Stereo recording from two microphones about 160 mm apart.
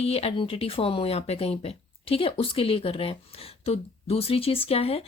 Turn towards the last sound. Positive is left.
turn(degrees=35)  # may be behind; listen again after turning